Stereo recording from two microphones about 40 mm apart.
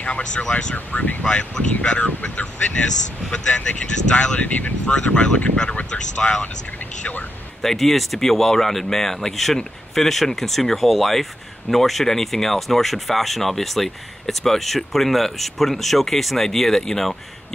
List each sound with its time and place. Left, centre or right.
0.0 s speech: left
4.4 s speech: left
4.8 s speech: left
7.6 s speech: centre